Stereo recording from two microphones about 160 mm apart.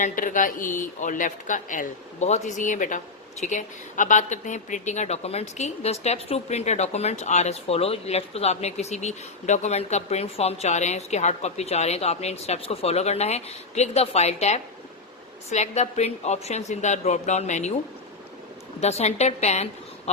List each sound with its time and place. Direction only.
0.0 s speech: 55° left (ahead or behind)
18.8 s speech: 40° left (ahead or behind)